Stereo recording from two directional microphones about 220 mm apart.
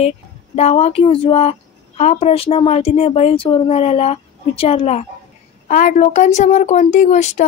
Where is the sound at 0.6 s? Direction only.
30° left (ahead or behind).